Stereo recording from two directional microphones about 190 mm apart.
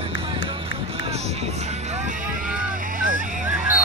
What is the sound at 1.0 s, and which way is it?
Vehicle, 35° right (ahead or behind).